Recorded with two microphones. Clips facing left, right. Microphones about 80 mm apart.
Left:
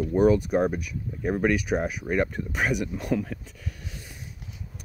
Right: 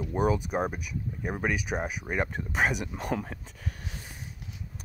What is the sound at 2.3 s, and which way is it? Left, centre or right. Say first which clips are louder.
Speech: left 1 dB; right.